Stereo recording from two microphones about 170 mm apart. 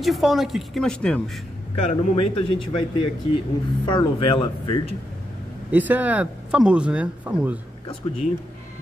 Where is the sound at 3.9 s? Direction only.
30° left (ahead or behind).